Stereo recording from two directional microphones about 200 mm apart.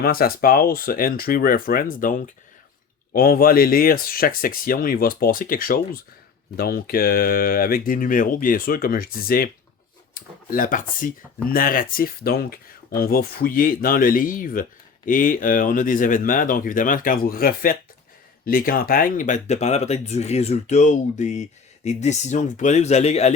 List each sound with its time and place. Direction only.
0.0 s speech: 45° left (ahead or behind)